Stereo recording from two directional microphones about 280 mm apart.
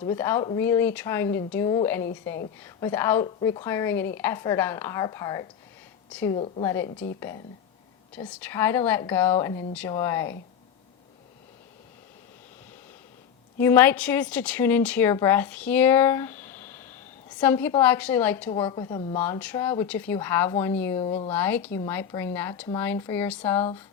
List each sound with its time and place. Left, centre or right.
0.0 s a woman's voice: centre
6.3 s speech: centre
13.6 s a woman's voice: centre
18.6 s speech: centre
21.0 s speech: centre
21.3 s speech: centre